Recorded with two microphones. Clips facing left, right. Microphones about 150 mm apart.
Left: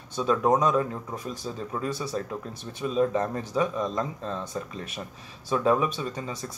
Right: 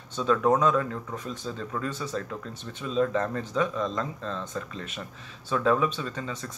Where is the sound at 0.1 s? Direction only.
10° left (ahead or behind).